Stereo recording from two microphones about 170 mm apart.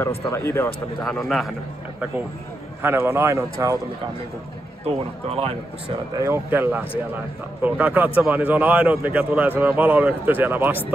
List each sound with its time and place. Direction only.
0.3 s speech: 15° left (ahead or behind)
1.0 s a man's voice: centre (ahead or behind)
2.8 s a man's voice: 15° right (ahead or behind)
4.8 s speech: 35° right (ahead or behind)
6.1 s a man's voice: 15° right (ahead or behind)